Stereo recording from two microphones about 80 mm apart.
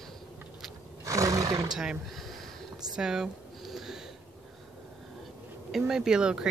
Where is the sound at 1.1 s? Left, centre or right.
Right.